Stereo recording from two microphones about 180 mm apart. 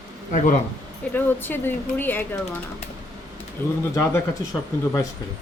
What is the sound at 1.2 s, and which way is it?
Speech, 10° left (ahead or behind).